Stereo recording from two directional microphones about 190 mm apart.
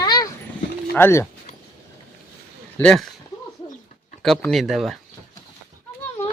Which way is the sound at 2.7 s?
5° left (ahead or behind).